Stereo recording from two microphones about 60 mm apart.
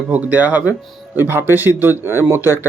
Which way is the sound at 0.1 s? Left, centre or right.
Right.